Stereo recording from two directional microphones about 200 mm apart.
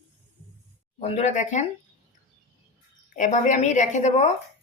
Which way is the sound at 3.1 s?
35° left (ahead or behind).